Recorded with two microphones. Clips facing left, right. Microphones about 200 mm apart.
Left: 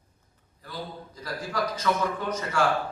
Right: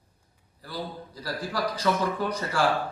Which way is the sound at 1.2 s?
35° right (ahead or behind).